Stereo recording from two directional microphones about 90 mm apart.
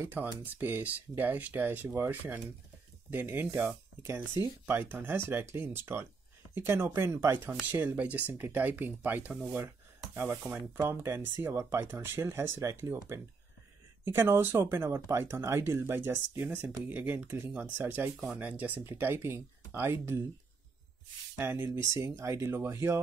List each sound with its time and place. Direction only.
0.1 s speech: 20° right (ahead or behind)
21.4 s speech: 25° right (ahead or behind)